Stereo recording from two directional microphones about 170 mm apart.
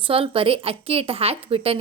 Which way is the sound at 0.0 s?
30° right (ahead or behind).